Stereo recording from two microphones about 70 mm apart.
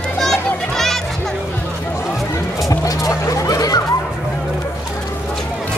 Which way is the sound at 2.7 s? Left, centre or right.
Left.